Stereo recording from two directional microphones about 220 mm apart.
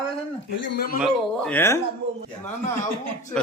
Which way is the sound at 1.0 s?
5° left (ahead or behind).